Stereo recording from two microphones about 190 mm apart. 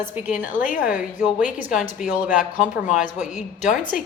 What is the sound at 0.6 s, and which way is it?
Speech, 45° left (ahead or behind).